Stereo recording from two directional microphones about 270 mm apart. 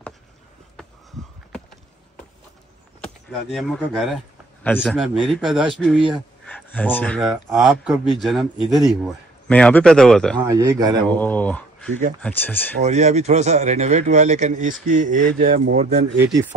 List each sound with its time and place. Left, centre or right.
3.3 s speech: centre
10.4 s a man's voice: centre
11.1 s speech: centre
12.8 s a man's voice: right